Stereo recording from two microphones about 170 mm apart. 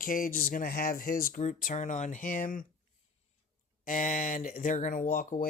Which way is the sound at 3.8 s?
50° left (ahead or behind).